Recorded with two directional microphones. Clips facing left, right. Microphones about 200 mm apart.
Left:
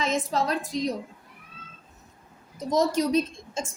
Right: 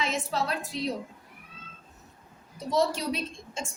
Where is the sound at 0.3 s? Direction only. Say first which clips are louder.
Left 4 dB; 40° left (ahead or behind).